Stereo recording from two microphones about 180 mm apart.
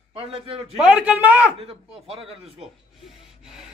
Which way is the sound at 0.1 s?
30° right (ahead or behind).